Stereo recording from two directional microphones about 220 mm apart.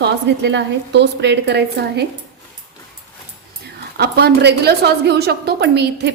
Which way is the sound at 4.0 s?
50° right (ahead or behind).